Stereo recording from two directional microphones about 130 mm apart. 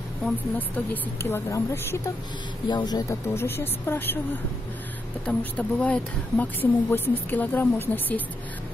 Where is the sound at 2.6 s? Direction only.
35° left (ahead or behind); by 4.1 s 15° left (ahead or behind).